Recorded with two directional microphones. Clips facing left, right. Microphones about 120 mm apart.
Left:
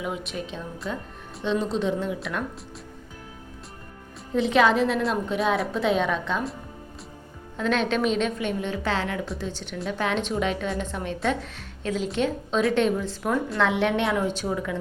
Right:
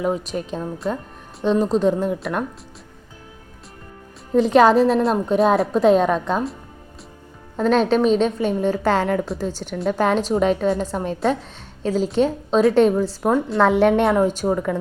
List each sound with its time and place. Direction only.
0.0 s a woman's voice: 40° right (ahead or behind)
4.4 s a woman's voice: 40° right (ahead or behind)
7.5 s a woman's voice: 40° right (ahead or behind)